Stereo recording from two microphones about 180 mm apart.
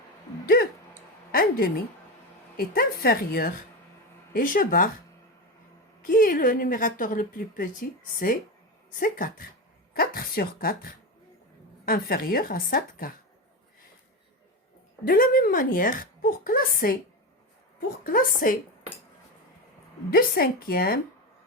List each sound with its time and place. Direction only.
0.4 s a sound: 55° left (ahead or behind)
1.3 s a woman's voice: 55° left (ahead or behind)
6.0 s a woman's voice: 50° left (ahead or behind)
15.0 s a woman's voice: 50° left (ahead or behind)
20.1 s a woman's voice: 55° left (ahead or behind)